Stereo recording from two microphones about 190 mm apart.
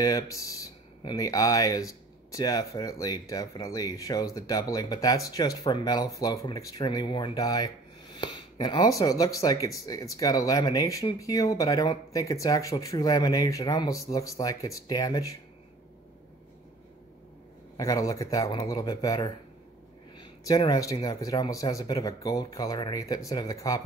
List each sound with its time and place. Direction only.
0.0 s speech: 15° left (ahead or behind)
17.7 s speech: 15° left (ahead or behind)